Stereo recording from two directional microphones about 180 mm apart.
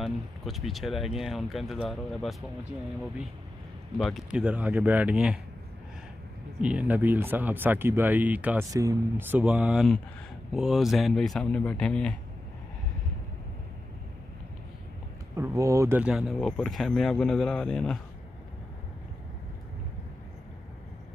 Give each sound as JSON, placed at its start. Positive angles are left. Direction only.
{"t": 0.0, "sound": "speech", "side_deg": 0}
{"t": 4.0, "sound": "speech", "side_deg": -5}
{"t": 6.6, "sound": "speech", "side_deg": -5}
{"t": 15.3, "sound": "speech", "side_deg": -15}
{"t": 16.0, "sound": "speech", "side_deg": -5}